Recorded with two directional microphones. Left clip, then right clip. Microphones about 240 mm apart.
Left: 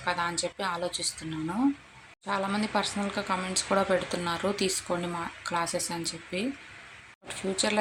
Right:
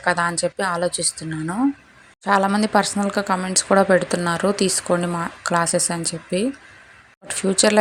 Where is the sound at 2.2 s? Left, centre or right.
Right.